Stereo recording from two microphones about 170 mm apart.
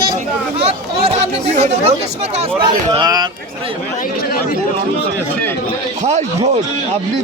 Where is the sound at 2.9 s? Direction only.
25° right (ahead or behind).